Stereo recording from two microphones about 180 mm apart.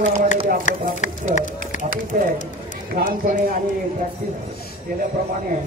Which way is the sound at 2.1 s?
50° right (ahead or behind).